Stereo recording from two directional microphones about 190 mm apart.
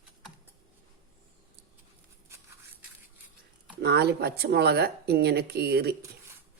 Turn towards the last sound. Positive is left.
turn(degrees=-55)  # may be behind; listen again after turning